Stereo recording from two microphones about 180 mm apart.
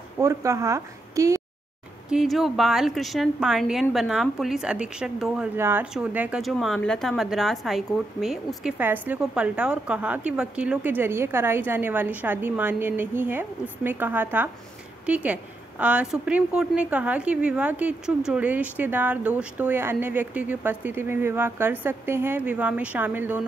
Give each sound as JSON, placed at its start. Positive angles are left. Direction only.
{"t": 0.2, "sound": "speech", "side_deg": -15}
{"t": 2.0, "sound": "a woman's voice", "side_deg": 0}